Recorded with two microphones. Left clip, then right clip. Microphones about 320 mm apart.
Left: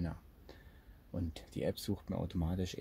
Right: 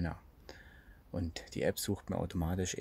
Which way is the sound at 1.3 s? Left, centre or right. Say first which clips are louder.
Right 4 dB; right.